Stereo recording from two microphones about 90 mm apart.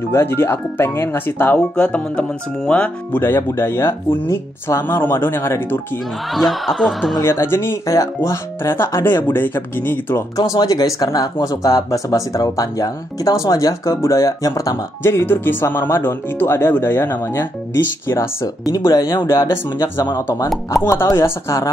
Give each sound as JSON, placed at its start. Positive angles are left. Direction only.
{"t": 0.1, "sound": "speech", "side_deg": 25}
{"t": 3.2, "sound": "speech", "side_deg": 30}
{"t": 6.3, "sound": "music", "side_deg": 0}
{"t": 7.2, "sound": "speech", "side_deg": 30}
{"t": 10.3, "sound": "speech", "side_deg": 40}
{"t": 18.7, "sound": "speech", "side_deg": 40}
{"t": 19.1, "sound": "speech", "side_deg": 30}